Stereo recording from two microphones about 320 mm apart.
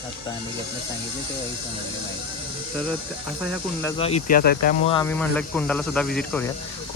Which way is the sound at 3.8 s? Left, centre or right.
Centre.